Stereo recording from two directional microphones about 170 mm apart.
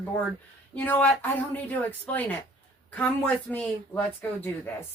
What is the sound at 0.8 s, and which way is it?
Speech, 10° left (ahead or behind).